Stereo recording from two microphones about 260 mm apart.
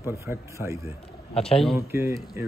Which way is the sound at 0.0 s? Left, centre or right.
Centre.